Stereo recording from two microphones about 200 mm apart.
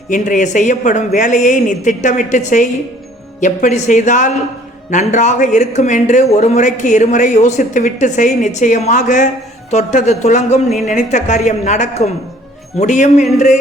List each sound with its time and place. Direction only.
0.1 s speech: 40° left (ahead or behind)